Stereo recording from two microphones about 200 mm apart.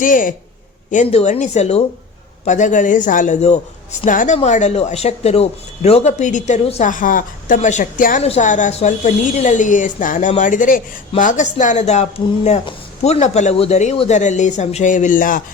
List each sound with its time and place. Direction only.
0.0 s a man's voice: 40° left (ahead or behind)